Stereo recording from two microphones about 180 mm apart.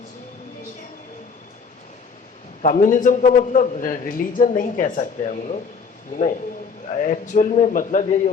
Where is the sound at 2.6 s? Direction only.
45° left (ahead or behind).